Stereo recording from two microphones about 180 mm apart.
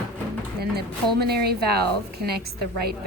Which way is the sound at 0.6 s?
60° right (ahead or behind).